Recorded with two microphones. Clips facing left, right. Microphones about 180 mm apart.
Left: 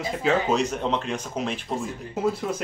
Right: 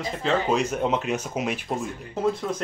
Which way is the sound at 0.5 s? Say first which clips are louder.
Right 1 dB; 5° right (ahead or behind).